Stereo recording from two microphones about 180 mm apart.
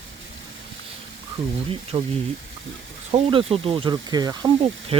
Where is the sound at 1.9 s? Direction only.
30° right (ahead or behind).